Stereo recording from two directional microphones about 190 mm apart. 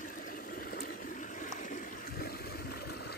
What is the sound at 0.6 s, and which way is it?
Water, 45° left (ahead or behind).